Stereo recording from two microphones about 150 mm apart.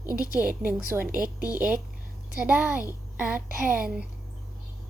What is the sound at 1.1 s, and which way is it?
Speech, 70° right (ahead or behind).